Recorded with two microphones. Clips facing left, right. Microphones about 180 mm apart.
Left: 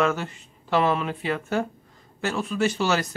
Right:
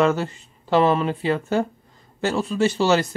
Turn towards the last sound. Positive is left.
turn(degrees=-30)  # may be behind; listen again after turning